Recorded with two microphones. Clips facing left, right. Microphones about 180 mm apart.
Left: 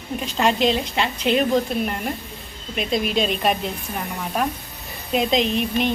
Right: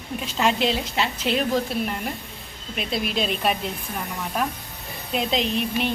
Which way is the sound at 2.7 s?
Centre (ahead or behind).